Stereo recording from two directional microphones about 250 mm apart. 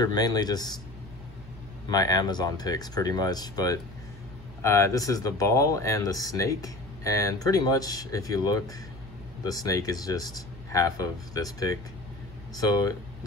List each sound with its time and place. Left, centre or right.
0.0 s speech: centre
1.9 s speech: centre